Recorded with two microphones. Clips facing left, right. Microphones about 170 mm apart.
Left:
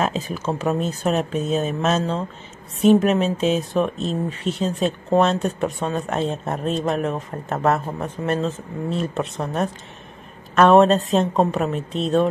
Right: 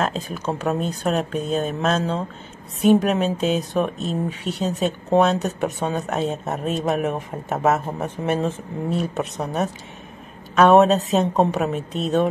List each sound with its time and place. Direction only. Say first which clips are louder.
0.0 s speech: left 1 dB; 5° left (ahead or behind)